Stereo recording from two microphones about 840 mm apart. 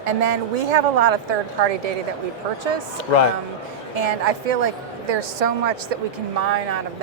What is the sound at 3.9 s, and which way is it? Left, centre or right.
A woman's voice, right.